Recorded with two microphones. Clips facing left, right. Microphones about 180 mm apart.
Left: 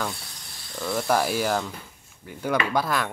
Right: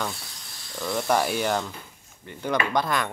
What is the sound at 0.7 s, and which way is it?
Speech, centre (ahead or behind).